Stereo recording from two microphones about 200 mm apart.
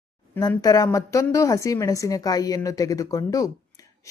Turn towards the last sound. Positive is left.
turn(degrees=15)  # may be behind; listen again after turning